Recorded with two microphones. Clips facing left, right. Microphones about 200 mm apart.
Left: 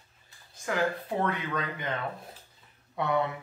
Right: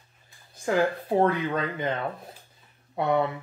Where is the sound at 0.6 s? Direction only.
30° right (ahead or behind).